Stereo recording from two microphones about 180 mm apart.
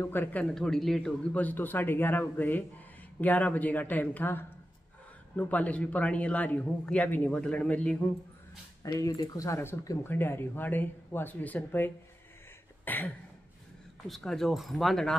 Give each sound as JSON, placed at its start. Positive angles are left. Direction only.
{"t": 0.0, "sound": "speech", "side_deg": 10}
{"t": 8.8, "sound": "speech", "side_deg": 20}
{"t": 12.8, "sound": "a sound", "side_deg": 10}
{"t": 14.0, "sound": "speech", "side_deg": 0}